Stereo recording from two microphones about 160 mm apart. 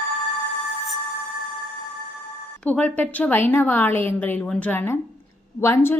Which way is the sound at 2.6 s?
10° left (ahead or behind).